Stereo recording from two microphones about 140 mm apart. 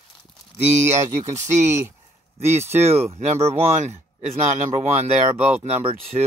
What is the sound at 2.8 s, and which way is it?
Speech, 50° right (ahead or behind).